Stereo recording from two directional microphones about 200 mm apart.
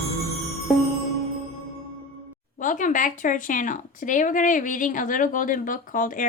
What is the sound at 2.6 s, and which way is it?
Speech, 40° left (ahead or behind).